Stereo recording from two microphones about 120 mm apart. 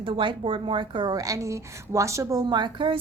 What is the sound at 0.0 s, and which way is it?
A woman's voice, 45° right (ahead or behind).